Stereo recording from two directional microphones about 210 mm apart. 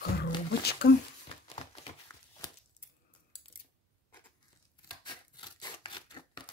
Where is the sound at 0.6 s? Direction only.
50° left (ahead or behind).